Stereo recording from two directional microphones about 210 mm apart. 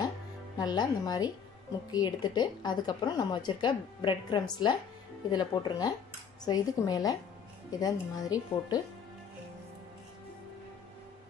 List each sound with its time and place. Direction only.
0.6 s a woman's voice: 20° left (ahead or behind)